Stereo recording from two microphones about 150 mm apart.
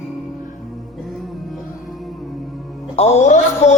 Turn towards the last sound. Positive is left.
turn(degrees=50)  # may be behind; listen again after turning